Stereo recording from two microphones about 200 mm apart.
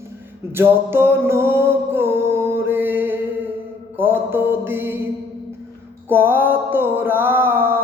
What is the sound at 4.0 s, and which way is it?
Mantra, 10° right (ahead or behind).